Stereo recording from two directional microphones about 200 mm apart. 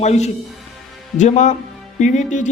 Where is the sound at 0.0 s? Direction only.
35° left (ahead or behind).